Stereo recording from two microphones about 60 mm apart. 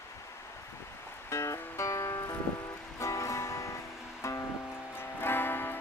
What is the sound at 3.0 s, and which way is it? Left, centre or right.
Music, left.